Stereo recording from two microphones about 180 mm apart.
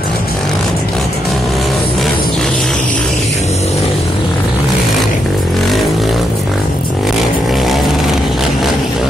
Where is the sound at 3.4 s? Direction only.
35° left (ahead or behind).